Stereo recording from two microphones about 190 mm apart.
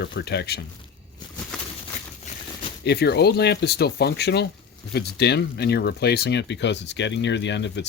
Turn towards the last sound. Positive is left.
turn(degrees=65)  # may be behind; listen again after turning